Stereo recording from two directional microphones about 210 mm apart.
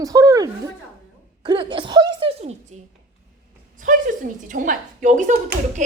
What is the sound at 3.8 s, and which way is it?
A woman's voice, 40° right (ahead or behind).